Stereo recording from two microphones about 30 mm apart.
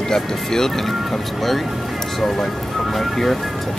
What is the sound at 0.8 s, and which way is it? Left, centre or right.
Speech, centre.